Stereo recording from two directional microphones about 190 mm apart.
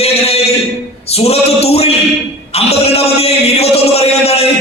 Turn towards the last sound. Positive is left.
turn(degrees=30)  # may be behind; listen again after turning